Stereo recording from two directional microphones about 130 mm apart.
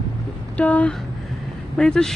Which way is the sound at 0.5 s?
10° left (ahead or behind).